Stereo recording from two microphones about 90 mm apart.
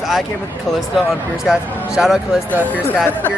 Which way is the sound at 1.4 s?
5° right (ahead or behind).